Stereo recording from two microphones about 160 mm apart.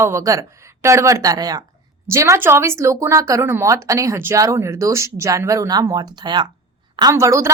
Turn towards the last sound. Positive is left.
turn(degrees=-20)  # may be behind; listen again after turning